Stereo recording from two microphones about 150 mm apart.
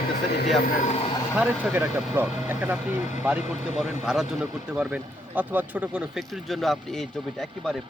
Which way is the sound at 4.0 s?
5° right (ahead or behind).